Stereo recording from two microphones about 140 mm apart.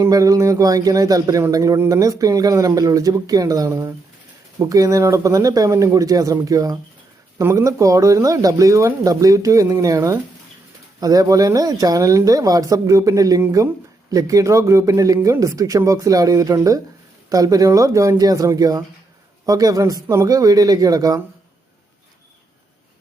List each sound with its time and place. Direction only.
0.0 s speech: 25° right (ahead or behind)